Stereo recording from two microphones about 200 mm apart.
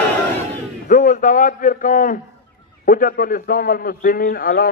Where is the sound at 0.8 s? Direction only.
40° left (ahead or behind).